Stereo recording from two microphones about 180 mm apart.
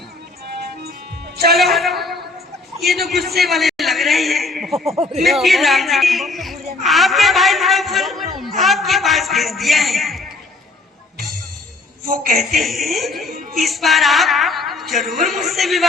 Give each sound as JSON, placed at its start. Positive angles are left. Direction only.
{"t": 1.5, "sound": "a woman's voice", "side_deg": 0}
{"t": 3.3, "sound": "a sound", "side_deg": 0}
{"t": 4.9, "sound": "speech", "side_deg": -35}
{"t": 5.2, "sound": "a man's voice", "side_deg": 0}
{"t": 12.0, "sound": "a man's voice", "side_deg": -50}
{"t": 12.4, "sound": "a woman's voice", "side_deg": 0}